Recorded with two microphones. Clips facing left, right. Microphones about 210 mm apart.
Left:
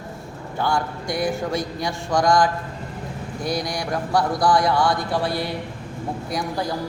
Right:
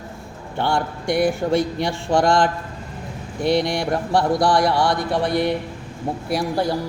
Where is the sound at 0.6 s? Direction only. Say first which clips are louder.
Right 2 dB; 25° right (ahead or behind).